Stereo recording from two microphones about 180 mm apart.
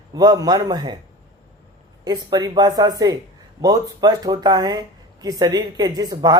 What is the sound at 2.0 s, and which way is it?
Speech, 20° right (ahead or behind).